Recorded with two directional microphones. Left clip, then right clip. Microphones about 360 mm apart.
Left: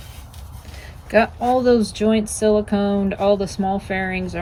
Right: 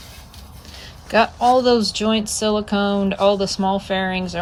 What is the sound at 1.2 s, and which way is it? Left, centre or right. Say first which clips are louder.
Speech: right 5 dB; centre.